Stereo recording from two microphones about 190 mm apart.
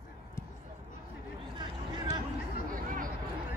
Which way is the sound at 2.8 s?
45° right (ahead or behind).